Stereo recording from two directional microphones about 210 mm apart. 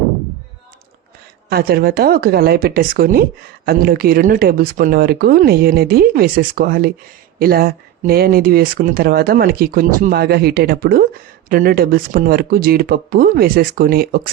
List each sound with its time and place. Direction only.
1.5 s speech: 45° right (ahead or behind)